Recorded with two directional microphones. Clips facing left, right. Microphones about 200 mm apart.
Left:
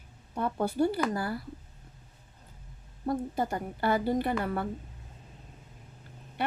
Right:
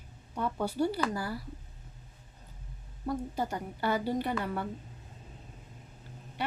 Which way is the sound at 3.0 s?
50° left (ahead or behind).